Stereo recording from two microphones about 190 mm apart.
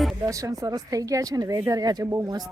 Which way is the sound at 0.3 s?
15° right (ahead or behind).